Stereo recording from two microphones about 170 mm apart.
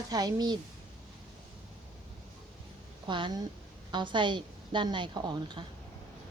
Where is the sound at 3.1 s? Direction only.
30° right (ahead or behind).